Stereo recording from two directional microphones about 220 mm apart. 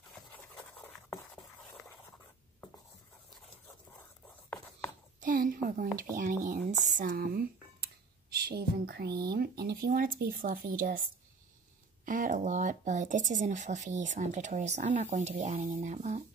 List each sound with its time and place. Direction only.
0.4 s a sound: 10° left (ahead or behind)
5.2 s speech: 40° right (ahead or behind)
12.1 s speech: 35° right (ahead or behind)